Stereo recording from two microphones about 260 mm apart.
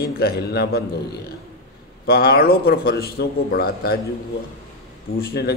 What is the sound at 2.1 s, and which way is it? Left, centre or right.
A man's voice, left.